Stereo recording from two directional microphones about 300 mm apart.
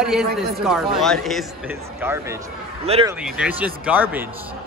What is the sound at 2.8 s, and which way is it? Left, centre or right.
Speech, centre.